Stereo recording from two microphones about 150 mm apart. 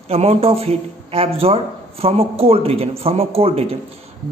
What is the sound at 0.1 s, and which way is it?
A man's voice, 40° right (ahead or behind).